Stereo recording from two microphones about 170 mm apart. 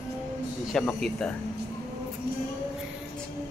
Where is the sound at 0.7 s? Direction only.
5° left (ahead or behind).